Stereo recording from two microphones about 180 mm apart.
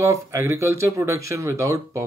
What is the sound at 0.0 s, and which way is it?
Speech, 15° right (ahead or behind).